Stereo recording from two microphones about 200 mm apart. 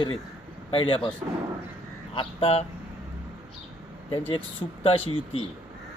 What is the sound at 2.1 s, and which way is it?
Speech, 30° left (ahead or behind).